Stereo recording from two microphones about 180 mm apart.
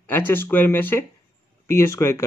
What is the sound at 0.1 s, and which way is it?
Speech, 10° left (ahead or behind).